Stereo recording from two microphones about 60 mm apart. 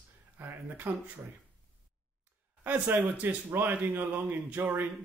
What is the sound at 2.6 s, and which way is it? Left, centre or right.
A man's voice, right.